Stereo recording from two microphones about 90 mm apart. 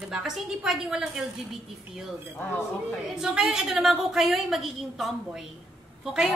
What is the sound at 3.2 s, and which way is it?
A woman's voice, 5° right (ahead or behind).